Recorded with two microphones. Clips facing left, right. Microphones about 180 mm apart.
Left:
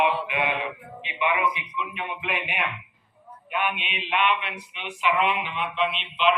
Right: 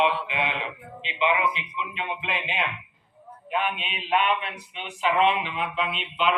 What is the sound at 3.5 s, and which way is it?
Speech, 35° right (ahead or behind).